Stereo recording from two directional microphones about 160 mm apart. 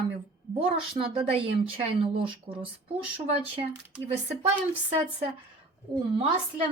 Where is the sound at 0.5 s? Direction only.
35° right (ahead or behind).